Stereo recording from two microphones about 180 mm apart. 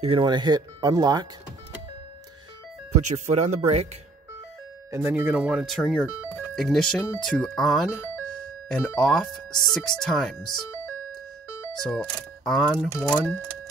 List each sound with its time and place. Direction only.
0.0 s speech: 30° right (ahead or behind)
3.0 s speech: 40° right (ahead or behind)
4.9 s speech: 10° right (ahead or behind)
11.9 s speech: centre (ahead or behind)